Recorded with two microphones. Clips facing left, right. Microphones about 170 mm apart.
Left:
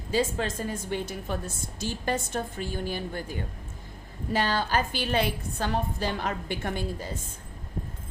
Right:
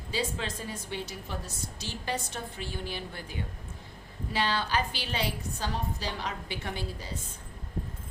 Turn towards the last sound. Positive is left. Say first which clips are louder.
# left 5 dB
turn(degrees=50)  # may be behind; listen again after turning